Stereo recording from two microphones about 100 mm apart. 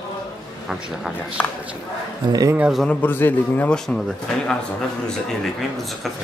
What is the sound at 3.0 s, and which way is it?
Speech, 20° left (ahead or behind).